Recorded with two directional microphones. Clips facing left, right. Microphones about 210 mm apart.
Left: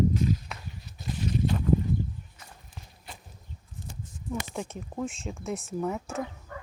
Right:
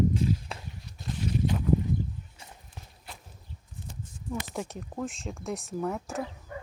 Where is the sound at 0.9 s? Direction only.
5° left (ahead or behind).